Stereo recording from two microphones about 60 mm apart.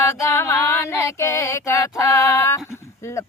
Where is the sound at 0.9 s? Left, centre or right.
Left.